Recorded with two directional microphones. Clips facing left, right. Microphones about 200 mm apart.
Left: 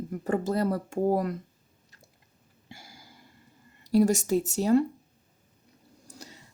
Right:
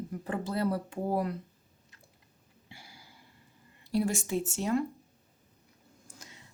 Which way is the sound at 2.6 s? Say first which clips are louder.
Left 4 dB; 45° left (ahead or behind).